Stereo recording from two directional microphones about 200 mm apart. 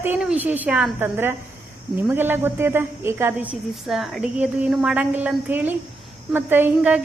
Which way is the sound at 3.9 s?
Centre (ahead or behind).